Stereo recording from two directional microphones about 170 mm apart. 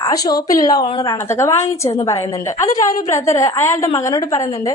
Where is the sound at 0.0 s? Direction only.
25° left (ahead or behind).